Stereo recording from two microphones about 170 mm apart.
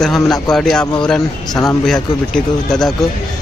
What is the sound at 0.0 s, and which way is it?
Speech, centre (ahead or behind).